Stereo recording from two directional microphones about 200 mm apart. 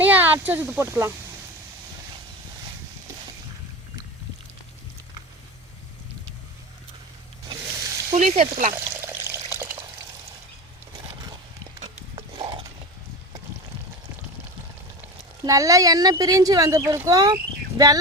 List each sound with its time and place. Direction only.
0.0 s speech: 10° right (ahead or behind)
7.4 s a sound: 20° right (ahead or behind)
8.1 s speech: 35° right (ahead or behind)
8.7 s water: 10° right (ahead or behind)
11.8 s horse: 25° right (ahead or behind)
15.4 s a woman's voice: 15° right (ahead or behind)